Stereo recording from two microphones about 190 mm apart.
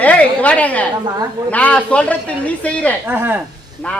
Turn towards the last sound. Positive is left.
turn(degrees=-10)  # may be behind; listen again after turning